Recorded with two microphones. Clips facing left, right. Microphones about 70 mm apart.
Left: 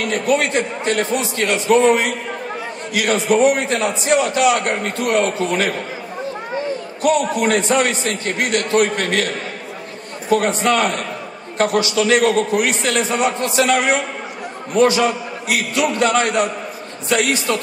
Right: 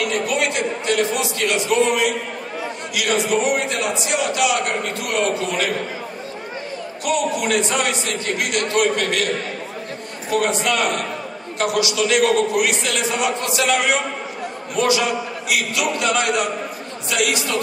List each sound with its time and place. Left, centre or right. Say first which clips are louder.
0.0 s a man's voice: left 3 dB; left
7.0 s a man's voice: left 4 dB; left
10.3 s a man's voice: left 4 dB; left